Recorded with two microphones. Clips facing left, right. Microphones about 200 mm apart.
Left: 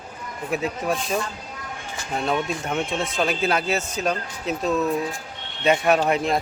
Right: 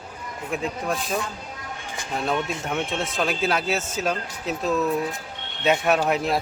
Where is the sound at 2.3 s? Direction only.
Centre (ahead or behind).